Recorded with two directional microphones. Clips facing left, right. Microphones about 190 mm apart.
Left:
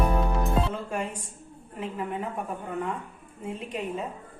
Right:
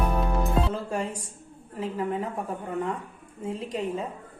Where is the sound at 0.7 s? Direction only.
35° right (ahead or behind).